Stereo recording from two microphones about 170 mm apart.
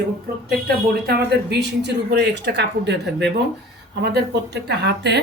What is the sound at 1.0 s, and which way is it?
Speech, 80° right.